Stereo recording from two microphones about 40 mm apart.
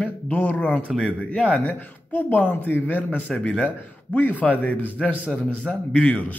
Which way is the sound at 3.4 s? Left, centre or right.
Left.